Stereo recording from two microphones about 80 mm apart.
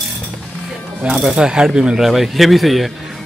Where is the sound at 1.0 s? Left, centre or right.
Centre.